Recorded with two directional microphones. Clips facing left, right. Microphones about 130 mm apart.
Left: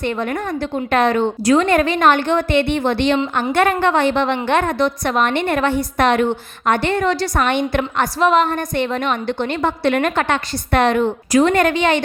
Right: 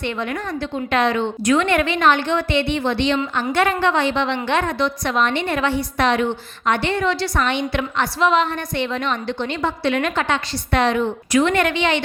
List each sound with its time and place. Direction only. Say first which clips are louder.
0.0 s a woman's voice: left 3 dB; 45° left (ahead or behind)
11.3 s a woman's voice: left 3 dB; 40° left (ahead or behind)